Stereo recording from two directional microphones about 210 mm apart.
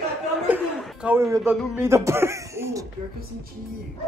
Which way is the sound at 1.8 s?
15° right (ahead or behind).